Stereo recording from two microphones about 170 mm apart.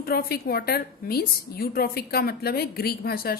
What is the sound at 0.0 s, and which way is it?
A woman's voice, 65° left (ahead or behind).